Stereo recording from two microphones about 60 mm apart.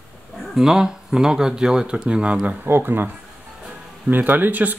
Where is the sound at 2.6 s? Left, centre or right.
Right.